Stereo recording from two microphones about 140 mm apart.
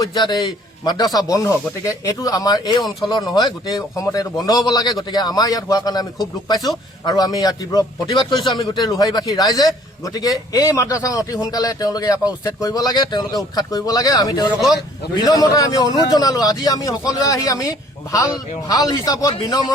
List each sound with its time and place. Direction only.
0.0 s a man's voice: 30° left (ahead or behind)